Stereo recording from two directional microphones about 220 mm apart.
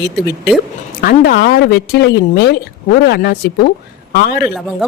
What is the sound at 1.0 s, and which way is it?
Speech, 45° left (ahead or behind).